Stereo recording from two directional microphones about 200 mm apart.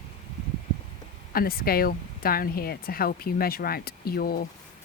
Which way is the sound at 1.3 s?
50° left (ahead or behind).